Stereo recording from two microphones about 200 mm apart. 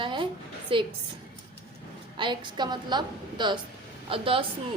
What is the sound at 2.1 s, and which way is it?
Speech, 25° right (ahead or behind).